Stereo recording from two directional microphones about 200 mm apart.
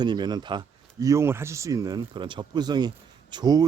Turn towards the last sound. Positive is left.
turn(degrees=-20)  # may be behind; listen again after turning